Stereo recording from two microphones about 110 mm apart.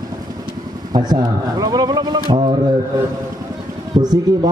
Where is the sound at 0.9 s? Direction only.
40° right (ahead or behind).